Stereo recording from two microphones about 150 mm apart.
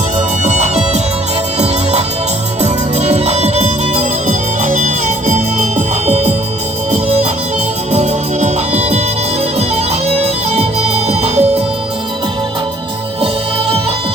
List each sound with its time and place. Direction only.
0.4 s music: 50° right (ahead or behind)